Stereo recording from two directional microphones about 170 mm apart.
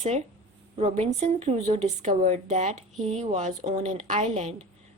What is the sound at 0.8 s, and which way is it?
A woman's voice, 35° right (ahead or behind).